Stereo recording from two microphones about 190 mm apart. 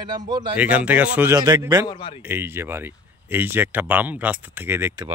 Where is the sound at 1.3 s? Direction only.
20° right (ahead or behind).